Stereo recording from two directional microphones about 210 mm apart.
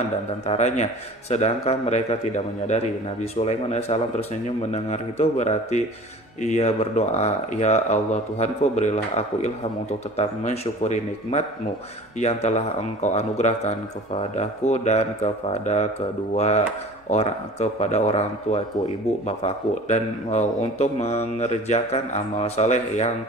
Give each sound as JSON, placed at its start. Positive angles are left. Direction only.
{"t": 0.5, "sound": "speech", "side_deg": 35}